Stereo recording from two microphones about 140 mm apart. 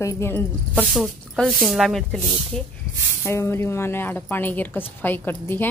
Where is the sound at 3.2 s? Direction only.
15° left (ahead or behind).